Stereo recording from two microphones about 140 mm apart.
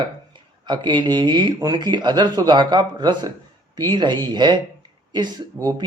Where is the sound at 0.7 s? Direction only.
30° right (ahead or behind).